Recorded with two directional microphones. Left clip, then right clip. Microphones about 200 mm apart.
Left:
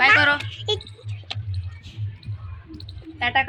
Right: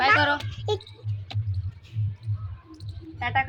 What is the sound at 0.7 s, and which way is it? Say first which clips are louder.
Speech: left 3 dB; 30° right (ahead or behind).